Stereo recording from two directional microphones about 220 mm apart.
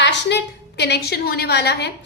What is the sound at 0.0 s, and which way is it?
A woman's voice, 50° left (ahead or behind).